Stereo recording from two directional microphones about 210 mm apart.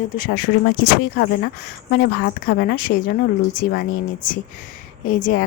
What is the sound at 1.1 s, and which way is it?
Speech, 60° left (ahead or behind).